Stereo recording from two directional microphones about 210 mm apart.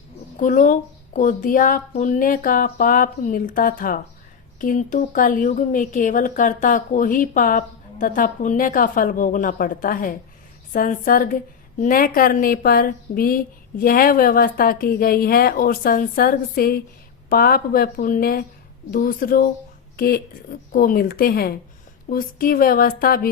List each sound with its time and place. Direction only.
0.3 s a woman's voice: 40° left (ahead or behind)